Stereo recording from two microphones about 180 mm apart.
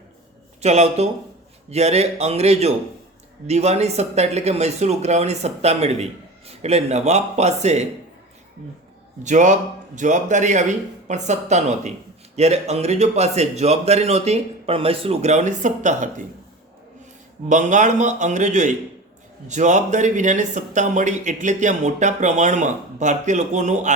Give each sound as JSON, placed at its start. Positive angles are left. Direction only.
{"t": 0.6, "sound": "speech", "side_deg": -35}
{"t": 9.2, "sound": "a man's voice", "side_deg": -45}
{"t": 17.5, "sound": "a man's voice", "side_deg": -45}